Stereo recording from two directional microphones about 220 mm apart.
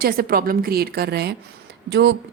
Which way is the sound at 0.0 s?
40° right (ahead or behind).